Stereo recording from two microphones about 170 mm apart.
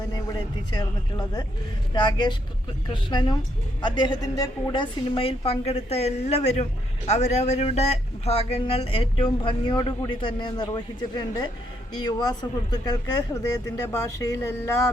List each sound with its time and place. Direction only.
0.7 s a woman's voice: 25° left (ahead or behind)